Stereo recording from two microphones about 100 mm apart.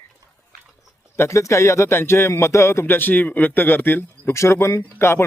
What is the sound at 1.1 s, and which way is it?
Speech, 25° left (ahead or behind).